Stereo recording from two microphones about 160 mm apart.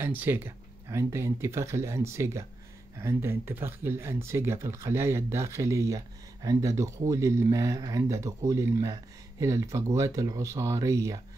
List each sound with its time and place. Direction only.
0.0 s speech: 10° right (ahead or behind)